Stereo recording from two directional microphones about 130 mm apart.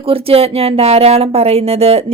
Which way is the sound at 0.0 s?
45° right (ahead or behind).